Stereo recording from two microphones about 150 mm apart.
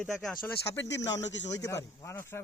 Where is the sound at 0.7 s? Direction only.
20° left (ahead or behind).